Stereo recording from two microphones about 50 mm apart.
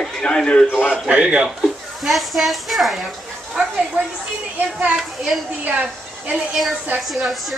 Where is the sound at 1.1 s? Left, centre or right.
Right.